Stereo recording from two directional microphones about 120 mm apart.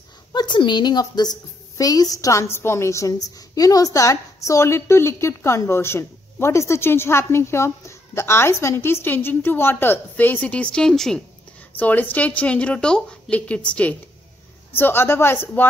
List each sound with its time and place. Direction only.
0.3 s a woman's voice: 40° left (ahead or behind); by 15.6 s 20° left (ahead or behind)